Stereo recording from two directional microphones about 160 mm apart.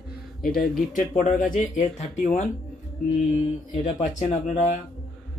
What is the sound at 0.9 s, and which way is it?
Speech, 50° left (ahead or behind).